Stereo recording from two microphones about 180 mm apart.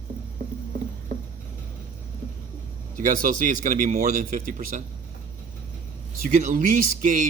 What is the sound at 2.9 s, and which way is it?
Speech, 50° right (ahead or behind).